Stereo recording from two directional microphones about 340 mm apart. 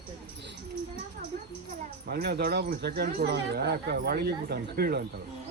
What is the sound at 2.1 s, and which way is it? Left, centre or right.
Speech, right.